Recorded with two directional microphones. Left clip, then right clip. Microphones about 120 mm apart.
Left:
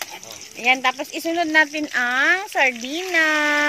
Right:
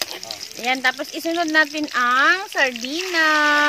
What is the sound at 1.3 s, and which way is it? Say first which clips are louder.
Speech: left 1 dB; 20° left (ahead or behind).